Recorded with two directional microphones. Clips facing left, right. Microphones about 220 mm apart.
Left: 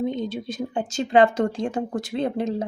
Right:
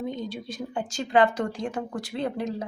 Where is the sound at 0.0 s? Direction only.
20° left (ahead or behind).